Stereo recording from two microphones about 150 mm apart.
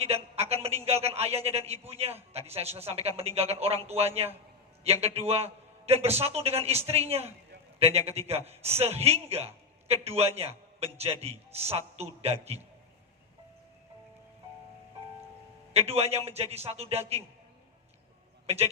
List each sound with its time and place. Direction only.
0.0 s a man's voice: 45° right (ahead or behind)
15.7 s a man's voice: 45° right (ahead or behind)
18.4 s speech: 45° right (ahead or behind)